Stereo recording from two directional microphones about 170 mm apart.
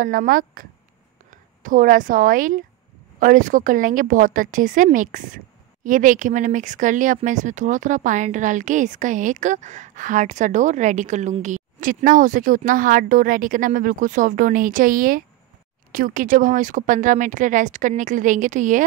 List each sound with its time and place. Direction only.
0.0 s speech: 55° right (ahead or behind)